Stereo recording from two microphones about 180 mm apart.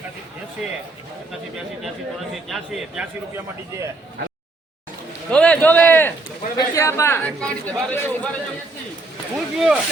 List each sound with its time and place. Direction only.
0.6 s a man's voice: 5° right (ahead or behind)
2.5 s a man's voice: centre (ahead or behind)
5.3 s a man's voice: 5° left (ahead or behind)
9.3 s a man's voice: 5° right (ahead or behind)